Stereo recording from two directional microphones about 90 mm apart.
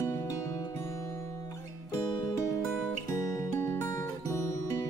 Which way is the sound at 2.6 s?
Centre (ahead or behind).